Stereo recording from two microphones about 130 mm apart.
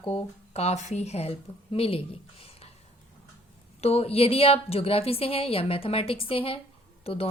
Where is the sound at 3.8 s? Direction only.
50° left (ahead or behind).